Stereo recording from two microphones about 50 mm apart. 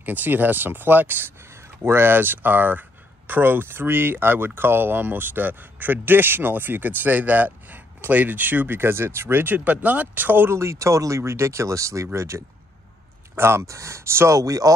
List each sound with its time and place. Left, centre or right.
0.0 s speech: right
1.5 s speech: right
9.7 s speech: right
10.5 s speech: right
13.4 s speech: right